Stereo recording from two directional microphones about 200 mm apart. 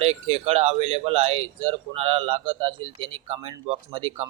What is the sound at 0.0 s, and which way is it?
Speech, 30° right (ahead or behind).